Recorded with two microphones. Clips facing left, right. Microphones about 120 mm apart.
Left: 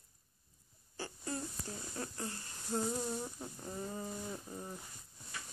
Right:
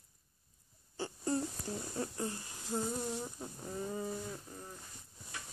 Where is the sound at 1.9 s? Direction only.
20° right (ahead or behind).